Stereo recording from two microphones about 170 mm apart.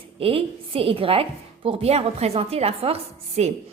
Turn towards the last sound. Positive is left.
turn(degrees=-35)  # may be behind; listen again after turning